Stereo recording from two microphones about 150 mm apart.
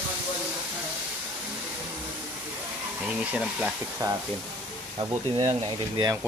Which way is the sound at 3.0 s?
5° right (ahead or behind).